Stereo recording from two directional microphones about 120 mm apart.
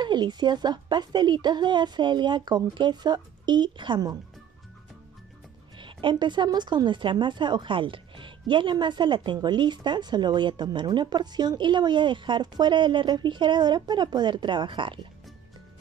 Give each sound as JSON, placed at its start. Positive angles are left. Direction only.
{"t": 0.0, "sound": "speech", "side_deg": -40}
{"t": 5.8, "sound": "speech", "side_deg": -45}